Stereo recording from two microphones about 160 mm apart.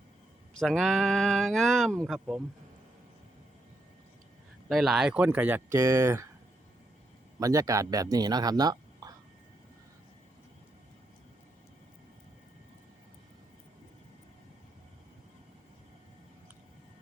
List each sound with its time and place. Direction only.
0.6 s speech: centre (ahead or behind)
4.7 s speech: centre (ahead or behind); by 6.2 s 20° right (ahead or behind)
7.3 s speech: 20° right (ahead or behind)